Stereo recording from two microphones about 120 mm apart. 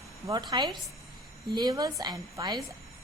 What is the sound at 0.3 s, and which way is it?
A woman's voice, 35° right (ahead or behind).